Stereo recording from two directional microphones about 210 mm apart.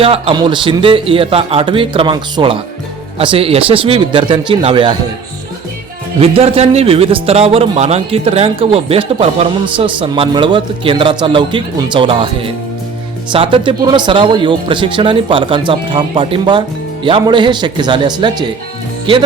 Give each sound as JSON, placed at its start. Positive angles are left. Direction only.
{"t": 0.0, "sound": "speech", "side_deg": -25}
{"t": 6.1, "sound": "speech", "side_deg": -30}